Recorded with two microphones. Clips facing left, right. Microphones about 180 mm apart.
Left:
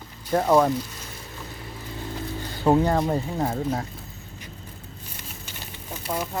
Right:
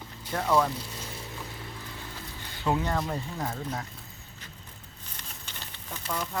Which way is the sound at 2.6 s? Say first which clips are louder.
Left 8 dB; 40° left (ahead or behind).